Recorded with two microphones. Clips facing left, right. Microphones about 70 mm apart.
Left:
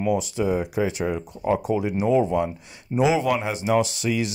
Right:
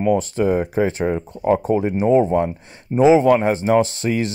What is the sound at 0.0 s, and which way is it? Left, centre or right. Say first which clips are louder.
Speech: right 5 dB; right.